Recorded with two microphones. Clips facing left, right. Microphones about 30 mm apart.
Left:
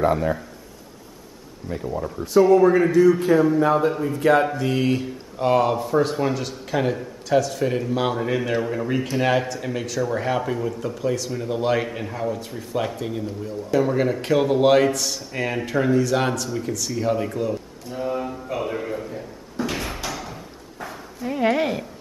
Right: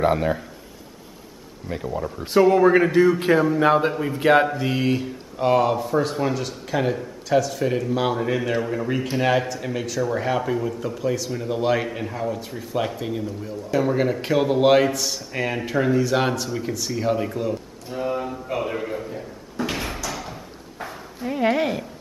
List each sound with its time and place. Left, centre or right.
0.0 s a man's voice: right
1.9 s speech: centre
2.5 s a man's voice: right
4.1 s a man's voice: right
4.5 s speech: centre
16.0 s a sound: centre
19.7 s door: centre
20.1 s a sound: centre